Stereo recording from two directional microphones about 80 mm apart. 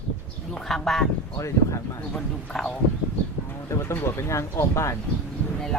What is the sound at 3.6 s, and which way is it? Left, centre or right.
Speech, left.